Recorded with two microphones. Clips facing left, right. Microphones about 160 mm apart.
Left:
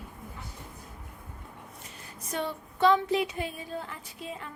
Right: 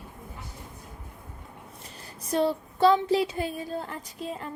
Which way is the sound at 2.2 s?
35° right (ahead or behind).